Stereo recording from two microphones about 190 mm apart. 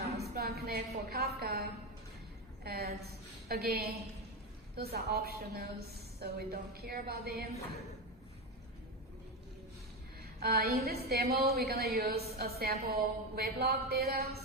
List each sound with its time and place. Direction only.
0.2 s music: 55° right (ahead or behind)
2.6 s a woman's voice: 55° right (ahead or behind)
10.4 s a woman's voice: 55° right (ahead or behind)